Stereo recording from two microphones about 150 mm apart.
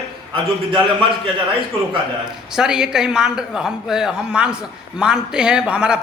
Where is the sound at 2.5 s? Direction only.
5° right (ahead or behind).